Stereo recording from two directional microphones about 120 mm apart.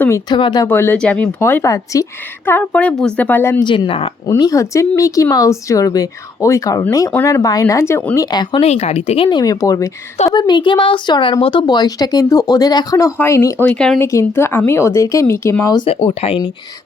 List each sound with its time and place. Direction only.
0.3 s speech: 40° left (ahead or behind)
0.7 s speech: 15° left (ahead or behind)
2.5 s speech: 15° left (ahead or behind)
3.6 s speech: 40° left (ahead or behind)
4.3 s speech: 30° left (ahead or behind)
8.6 s speech: 65° left (ahead or behind); by 9.4 s 50° left (ahead or behind)
9.4 s speech: 30° left (ahead or behind)
10.3 s speech: 40° left (ahead or behind); by 14.0 s 5° left (ahead or behind)
14.0 s speech: 25° left (ahead or behind)
15.9 s speech: 55° left (ahead or behind)